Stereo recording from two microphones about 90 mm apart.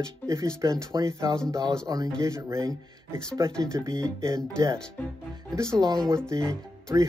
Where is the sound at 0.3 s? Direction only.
35° right (ahead or behind).